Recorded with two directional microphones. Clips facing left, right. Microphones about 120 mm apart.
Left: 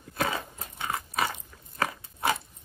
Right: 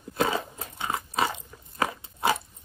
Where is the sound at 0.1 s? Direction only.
25° right (ahead or behind).